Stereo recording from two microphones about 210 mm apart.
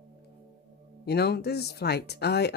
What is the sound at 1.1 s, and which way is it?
Speech, 50° left (ahead or behind).